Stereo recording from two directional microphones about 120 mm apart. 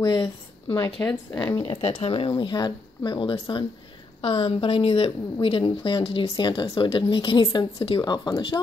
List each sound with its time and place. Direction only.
0.0 s speech: 40° left (ahead or behind)
0.8 s speech: 25° left (ahead or behind)
1.8 s speech: 65° left (ahead or behind)
2.1 s a woman's voice: 45° left (ahead or behind)
6.3 s a woman's voice: 40° left (ahead or behind)